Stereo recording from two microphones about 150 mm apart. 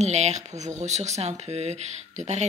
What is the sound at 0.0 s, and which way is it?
Speech, 50° right (ahead or behind).